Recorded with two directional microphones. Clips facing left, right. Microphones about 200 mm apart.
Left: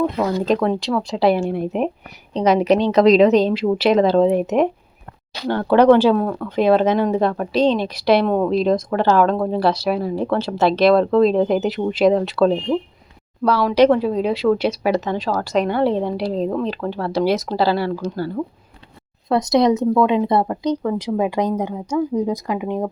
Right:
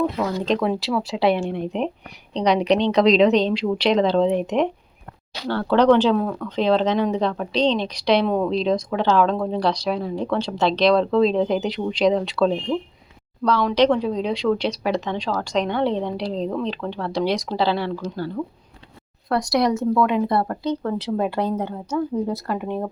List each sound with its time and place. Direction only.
0.2 s speech: 5° left (ahead or behind)
19.3 s a woman's voice: 20° left (ahead or behind)